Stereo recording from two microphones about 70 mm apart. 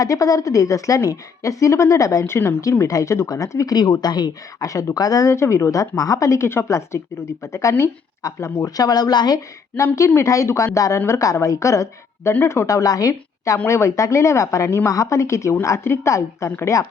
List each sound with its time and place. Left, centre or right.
0.0 s a woman's voice: left
2.2 s speech: left
2.8 s a woman's voice: left
3.8 s speech: left
4.6 s a woman's voice: left
5.3 s a woman's voice: left
8.6 s speech: left
9.7 s a woman's voice: left
12.3 s a woman's voice: left
13.7 s a woman's voice: left